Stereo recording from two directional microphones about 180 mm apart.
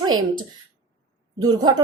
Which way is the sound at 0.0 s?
25° right (ahead or behind).